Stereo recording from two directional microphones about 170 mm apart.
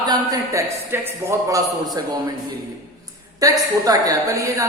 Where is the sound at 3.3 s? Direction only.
20° right (ahead or behind).